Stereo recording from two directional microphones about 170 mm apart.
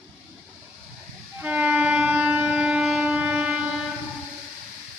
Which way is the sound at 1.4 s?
10° right (ahead or behind).